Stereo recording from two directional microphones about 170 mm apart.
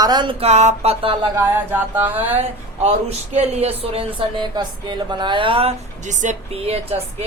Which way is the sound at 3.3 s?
40° right (ahead or behind).